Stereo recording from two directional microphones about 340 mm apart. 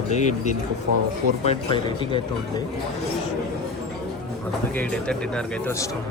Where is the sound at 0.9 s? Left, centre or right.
Right.